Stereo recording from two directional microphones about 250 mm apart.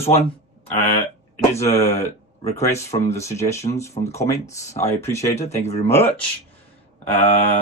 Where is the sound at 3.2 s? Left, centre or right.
Centre.